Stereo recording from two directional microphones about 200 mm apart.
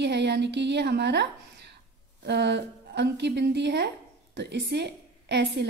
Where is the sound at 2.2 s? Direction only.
60° right (ahead or behind).